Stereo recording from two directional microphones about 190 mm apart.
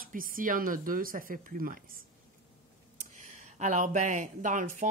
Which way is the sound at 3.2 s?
40° right (ahead or behind).